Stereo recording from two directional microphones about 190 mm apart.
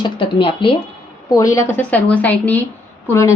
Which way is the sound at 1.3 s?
15° left (ahead or behind).